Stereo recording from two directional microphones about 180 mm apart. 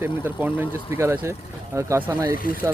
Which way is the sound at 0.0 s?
10° right (ahead or behind).